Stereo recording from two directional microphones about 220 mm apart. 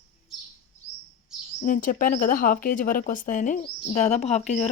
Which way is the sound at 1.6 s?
40° left (ahead or behind).